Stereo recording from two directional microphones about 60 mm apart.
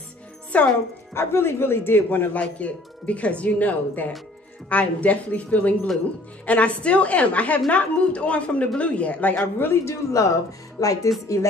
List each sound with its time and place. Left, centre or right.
0.5 s speech: left
1.1 s speech: left
9.7 s speech: left
10.8 s a woman's voice: left